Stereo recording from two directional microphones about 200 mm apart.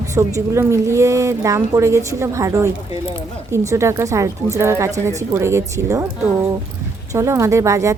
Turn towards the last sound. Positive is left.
turn(degrees=-15)  # may be behind; listen again after turning